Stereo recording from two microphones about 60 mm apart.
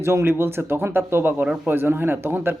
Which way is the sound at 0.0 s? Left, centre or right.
Right.